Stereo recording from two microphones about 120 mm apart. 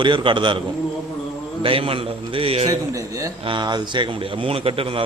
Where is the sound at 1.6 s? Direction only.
50° right (ahead or behind).